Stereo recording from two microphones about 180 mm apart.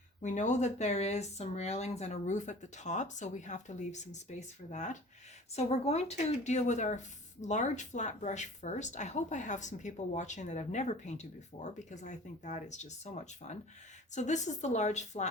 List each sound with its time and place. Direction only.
0.2 s speech: 45° left (ahead or behind)